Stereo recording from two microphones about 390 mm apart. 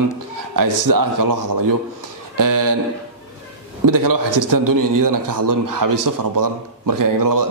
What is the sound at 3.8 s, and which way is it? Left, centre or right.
A man's voice, right.